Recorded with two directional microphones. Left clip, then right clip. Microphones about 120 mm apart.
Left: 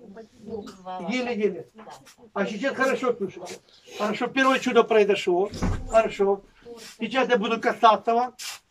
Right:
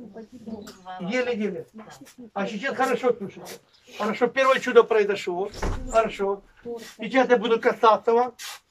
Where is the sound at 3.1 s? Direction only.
10° left (ahead or behind).